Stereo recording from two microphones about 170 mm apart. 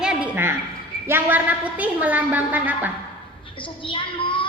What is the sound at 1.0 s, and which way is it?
A woman's voice, 10° right (ahead or behind).